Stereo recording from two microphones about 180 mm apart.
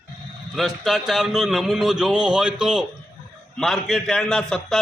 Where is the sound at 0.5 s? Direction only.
Centre (ahead or behind).